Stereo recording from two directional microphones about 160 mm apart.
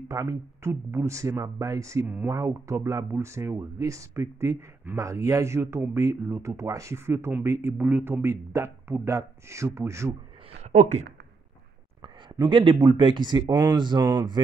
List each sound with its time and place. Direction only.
0.1 s speech: 20° right (ahead or behind)
10.6 s speech: 50° right (ahead or behind)
12.0 s speech: 30° right (ahead or behind)